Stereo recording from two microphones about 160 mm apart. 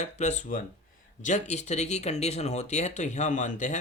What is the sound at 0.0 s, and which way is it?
Speech, 45° left (ahead or behind).